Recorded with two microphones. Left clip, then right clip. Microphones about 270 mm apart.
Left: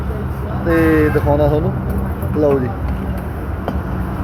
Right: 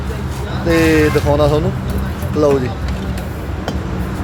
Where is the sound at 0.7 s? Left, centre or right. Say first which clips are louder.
Right 1 dB; centre.